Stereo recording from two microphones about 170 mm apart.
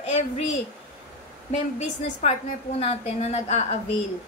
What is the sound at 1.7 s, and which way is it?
A woman's voice, 40° left (ahead or behind).